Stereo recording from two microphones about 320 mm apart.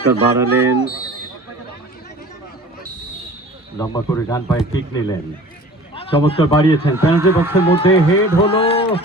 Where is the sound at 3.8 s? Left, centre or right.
Centre.